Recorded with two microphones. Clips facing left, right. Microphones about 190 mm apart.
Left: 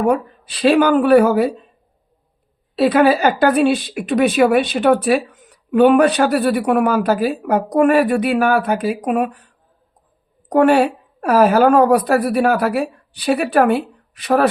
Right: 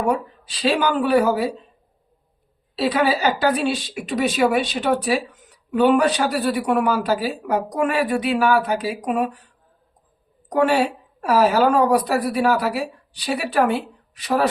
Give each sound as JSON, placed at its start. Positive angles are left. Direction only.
{"t": 0.1, "sound": "a woman's voice", "side_deg": 55}
{"t": 2.7, "sound": "a woman's voice", "side_deg": 50}
{"t": 10.5, "sound": "a woman's voice", "side_deg": 55}